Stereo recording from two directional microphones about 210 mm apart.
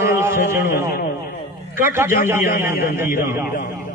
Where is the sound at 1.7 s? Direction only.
10° right (ahead or behind).